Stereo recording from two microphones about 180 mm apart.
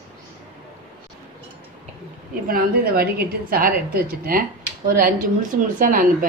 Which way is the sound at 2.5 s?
55° right (ahead or behind).